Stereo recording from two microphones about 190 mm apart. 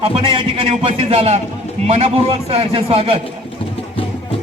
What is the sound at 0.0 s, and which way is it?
A man's voice, 30° right (ahead or behind).